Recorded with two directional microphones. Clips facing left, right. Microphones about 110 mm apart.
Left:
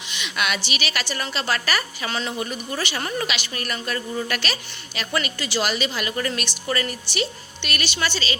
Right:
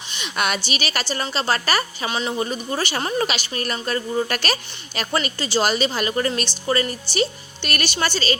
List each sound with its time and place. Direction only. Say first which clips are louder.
0.1 s a woman's voice: right 2 dB; 40° right (ahead or behind)
2.0 s a woman's voice: right 2 dB; 20° right (ahead or behind)
2.4 s a woman's voice: right 4 dB; 30° right (ahead or behind)
3.0 s a woman's voice: right 6 dB; 25° right (ahead or behind)
3.2 s a woman's voice: right 3 dB; 35° right (ahead or behind)